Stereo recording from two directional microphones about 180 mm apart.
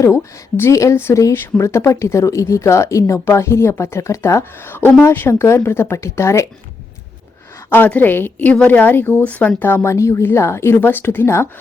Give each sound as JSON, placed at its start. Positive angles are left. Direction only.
{"t": 0.6, "sound": "speech", "side_deg": 15}
{"t": 7.7, "sound": "speech", "side_deg": 10}